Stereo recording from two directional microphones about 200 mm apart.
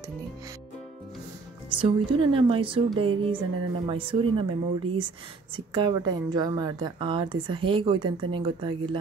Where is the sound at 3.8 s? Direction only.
25° right (ahead or behind).